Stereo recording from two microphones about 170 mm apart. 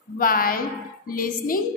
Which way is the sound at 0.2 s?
55° left (ahead or behind).